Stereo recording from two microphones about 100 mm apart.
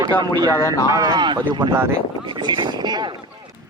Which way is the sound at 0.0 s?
40° right (ahead or behind).